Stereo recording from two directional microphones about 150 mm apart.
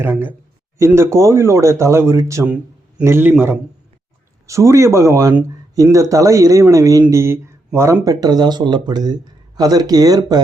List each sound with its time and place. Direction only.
0.0 s a man's voice: 15° right (ahead or behind)